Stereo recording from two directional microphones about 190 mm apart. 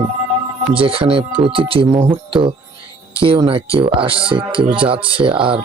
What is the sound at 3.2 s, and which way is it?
Speech, 30° right (ahead or behind).